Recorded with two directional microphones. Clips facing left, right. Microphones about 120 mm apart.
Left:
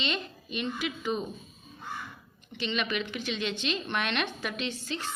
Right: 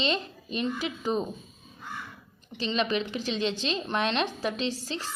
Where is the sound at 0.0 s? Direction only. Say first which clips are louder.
Right 4 dB; 35° right (ahead or behind).